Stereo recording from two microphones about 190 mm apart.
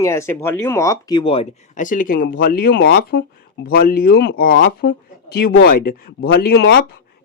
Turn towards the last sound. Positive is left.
turn(degrees=55)  # may be behind; listen again after turning